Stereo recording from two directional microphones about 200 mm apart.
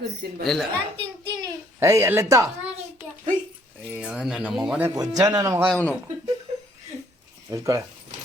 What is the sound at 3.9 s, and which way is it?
Speech, 5° right (ahead or behind).